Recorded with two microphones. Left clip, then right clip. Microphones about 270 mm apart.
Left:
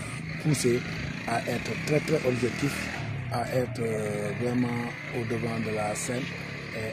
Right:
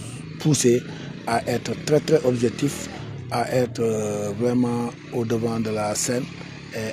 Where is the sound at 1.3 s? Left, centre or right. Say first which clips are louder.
Right 7 dB; right.